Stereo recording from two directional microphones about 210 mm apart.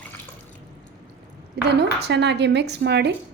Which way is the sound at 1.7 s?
55° right (ahead or behind).